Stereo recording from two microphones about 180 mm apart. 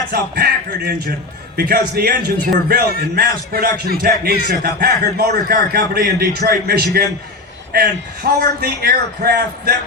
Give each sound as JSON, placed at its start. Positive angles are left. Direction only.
{"t": 0.1, "sound": "a man's voice", "side_deg": -60}